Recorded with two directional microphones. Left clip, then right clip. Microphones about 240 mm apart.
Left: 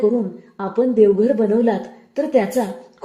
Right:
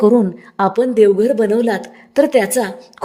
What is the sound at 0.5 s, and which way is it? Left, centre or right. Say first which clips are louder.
Speech: right 4 dB; right.